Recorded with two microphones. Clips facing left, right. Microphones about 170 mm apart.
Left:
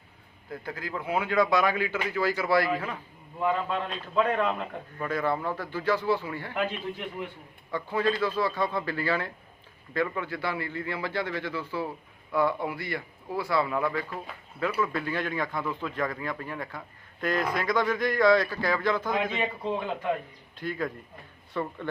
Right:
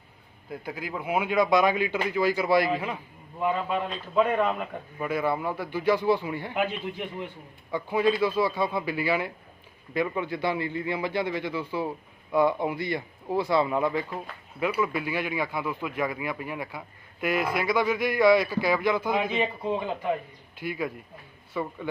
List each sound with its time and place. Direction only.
0.5 s a man's voice: 10° right (ahead or behind)
7.7 s a man's voice: 15° right (ahead or behind)